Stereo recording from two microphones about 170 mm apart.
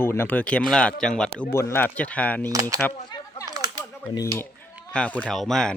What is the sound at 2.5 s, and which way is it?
Speech, 20° right (ahead or behind).